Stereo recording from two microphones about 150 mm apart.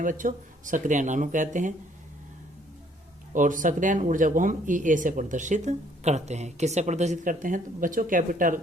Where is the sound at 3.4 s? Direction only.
60° right (ahead or behind).